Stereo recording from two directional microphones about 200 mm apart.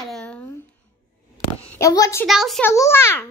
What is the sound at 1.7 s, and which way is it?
Speech, 15° left (ahead or behind).